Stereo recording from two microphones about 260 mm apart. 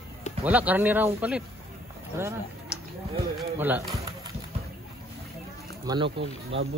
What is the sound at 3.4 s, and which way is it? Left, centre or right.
Speech, centre.